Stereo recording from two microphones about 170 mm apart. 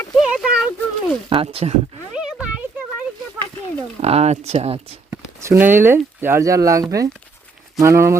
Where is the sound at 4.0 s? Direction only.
40° right (ahead or behind).